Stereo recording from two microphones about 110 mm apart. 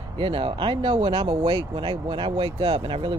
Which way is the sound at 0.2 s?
50° right (ahead or behind).